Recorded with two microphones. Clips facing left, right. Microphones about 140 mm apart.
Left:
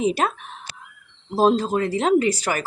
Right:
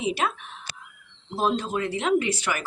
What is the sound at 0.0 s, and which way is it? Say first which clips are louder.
Speech: left 5 dB; 40° left (ahead or behind).